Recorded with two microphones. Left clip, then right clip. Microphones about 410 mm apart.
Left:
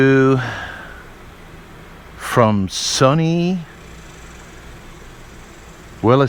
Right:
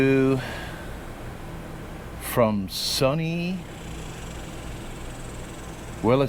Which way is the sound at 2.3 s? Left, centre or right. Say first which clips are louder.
Left 7 dB; left.